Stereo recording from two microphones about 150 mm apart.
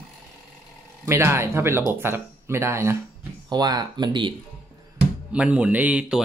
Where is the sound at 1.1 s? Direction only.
15° right (ahead or behind).